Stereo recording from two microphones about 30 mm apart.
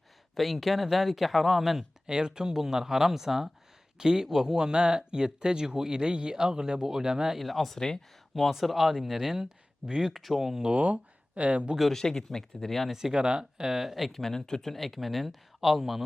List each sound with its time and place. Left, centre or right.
0.3 s speech: centre
2.0 s speech: right
7.3 s speech: centre
7.8 s speech: centre
8.4 s speech: centre
10.8 s speech: right
11.9 s speech: centre
13.1 s speech: right
13.7 s speech: centre
14.2 s speech: centre
14.7 s speech: centre